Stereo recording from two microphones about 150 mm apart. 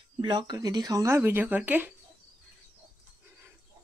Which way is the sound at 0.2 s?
30° right (ahead or behind).